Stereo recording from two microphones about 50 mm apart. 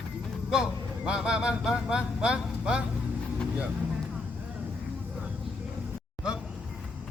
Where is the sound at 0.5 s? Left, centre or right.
Centre.